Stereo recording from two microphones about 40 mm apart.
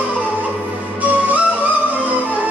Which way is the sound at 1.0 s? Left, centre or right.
Right.